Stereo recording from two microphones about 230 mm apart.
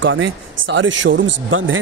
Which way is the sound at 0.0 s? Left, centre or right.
Right.